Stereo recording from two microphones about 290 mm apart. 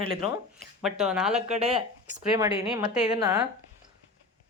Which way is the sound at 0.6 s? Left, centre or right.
Centre.